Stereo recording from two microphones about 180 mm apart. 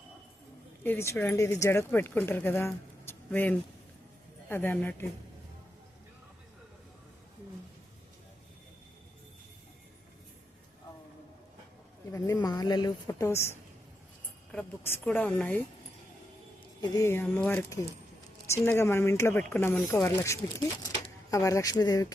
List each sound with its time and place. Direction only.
0.9 s speech: 15° left (ahead or behind)
12.1 s a woman's voice: 20° left (ahead or behind)
16.8 s a woman's voice: 20° left (ahead or behind)